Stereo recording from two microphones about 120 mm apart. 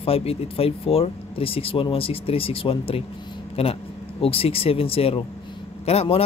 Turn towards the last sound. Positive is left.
turn(degrees=55)  # may be behind; listen again after turning